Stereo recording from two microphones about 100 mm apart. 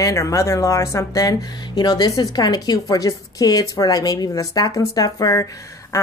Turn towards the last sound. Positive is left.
turn(degrees=35)  # may be behind; listen again after turning